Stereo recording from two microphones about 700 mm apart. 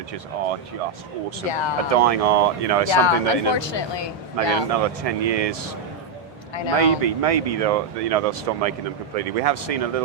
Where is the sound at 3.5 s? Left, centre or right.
Left.